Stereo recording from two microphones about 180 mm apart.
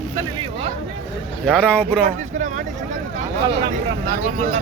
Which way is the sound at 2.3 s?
45° right (ahead or behind).